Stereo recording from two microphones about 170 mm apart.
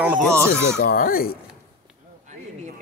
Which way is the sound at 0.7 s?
70° left (ahead or behind).